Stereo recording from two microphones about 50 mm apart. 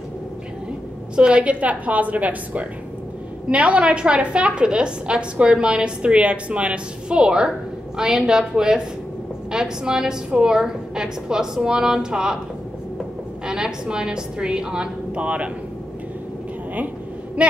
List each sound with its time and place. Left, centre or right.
1.1 s a woman's voice: right
13.5 s a woman's voice: centre
17.4 s a woman's voice: right